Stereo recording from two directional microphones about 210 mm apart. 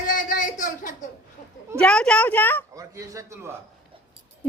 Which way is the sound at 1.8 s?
5° left (ahead or behind).